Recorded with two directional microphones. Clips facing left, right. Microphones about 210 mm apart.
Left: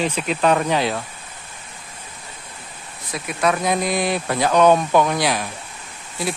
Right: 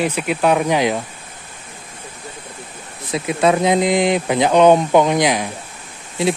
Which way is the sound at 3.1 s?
25° right (ahead or behind).